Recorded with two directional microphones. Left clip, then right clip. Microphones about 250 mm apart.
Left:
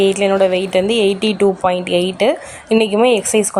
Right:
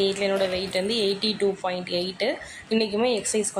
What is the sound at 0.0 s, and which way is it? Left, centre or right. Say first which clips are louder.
Speech: left 10 dB; left.